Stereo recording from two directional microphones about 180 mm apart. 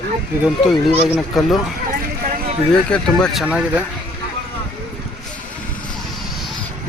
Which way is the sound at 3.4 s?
5° right (ahead or behind).